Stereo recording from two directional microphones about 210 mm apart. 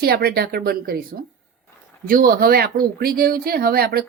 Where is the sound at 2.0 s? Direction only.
45° right (ahead or behind).